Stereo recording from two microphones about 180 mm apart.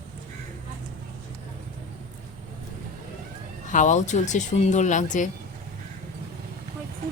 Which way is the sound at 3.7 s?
45° left (ahead or behind).